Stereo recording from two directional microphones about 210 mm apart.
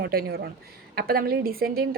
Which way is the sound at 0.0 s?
50° right (ahead or behind).